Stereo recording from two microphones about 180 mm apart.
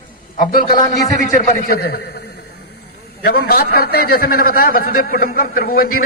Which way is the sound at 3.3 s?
60° left (ahead or behind).